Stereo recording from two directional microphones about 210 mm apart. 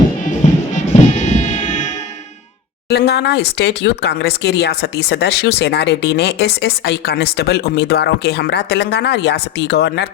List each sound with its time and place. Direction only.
0.3 s music: 35° left (ahead or behind)
2.9 s speech: 50° left (ahead or behind)